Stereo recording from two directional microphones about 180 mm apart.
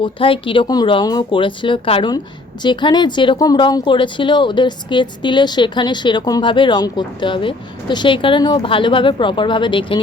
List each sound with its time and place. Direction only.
0.0 s speech: 30° left (ahead or behind)